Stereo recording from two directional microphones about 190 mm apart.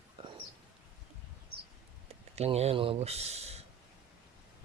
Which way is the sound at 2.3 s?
35° right (ahead or behind).